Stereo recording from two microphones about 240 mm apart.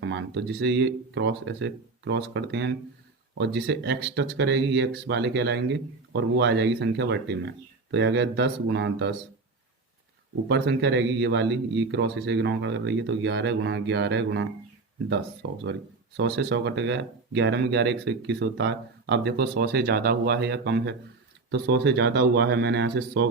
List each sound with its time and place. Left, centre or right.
0.0 s speech: right
10.5 s speech: right
15.6 s speech: right